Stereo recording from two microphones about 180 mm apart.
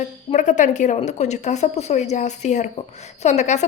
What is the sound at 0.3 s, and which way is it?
A woman's voice, 40° left (ahead or behind).